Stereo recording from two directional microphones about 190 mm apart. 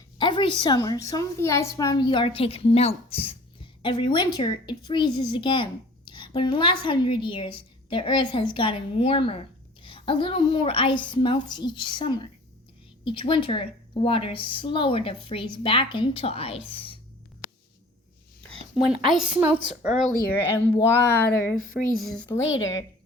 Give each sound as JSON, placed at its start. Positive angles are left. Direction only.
{"t": 0.2, "sound": "a woman's voice", "side_deg": 25}
{"t": 18.4, "sound": "a sound", "side_deg": 5}
{"t": 19.1, "sound": "a woman's voice", "side_deg": -5}
{"t": 19.9, "sound": "speech", "side_deg": 40}
{"t": 20.4, "sound": "speech", "side_deg": 10}
{"t": 21.2, "sound": "speech", "side_deg": 50}
{"t": 21.9, "sound": "a woman's voice", "side_deg": 0}
{"t": 22.4, "sound": "a woman's voice", "side_deg": 90}